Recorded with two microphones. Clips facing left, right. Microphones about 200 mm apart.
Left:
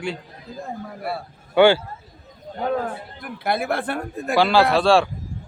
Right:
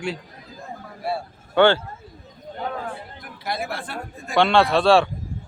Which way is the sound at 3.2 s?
55° left (ahead or behind).